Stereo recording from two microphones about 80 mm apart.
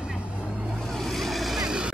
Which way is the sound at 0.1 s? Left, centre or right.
Centre.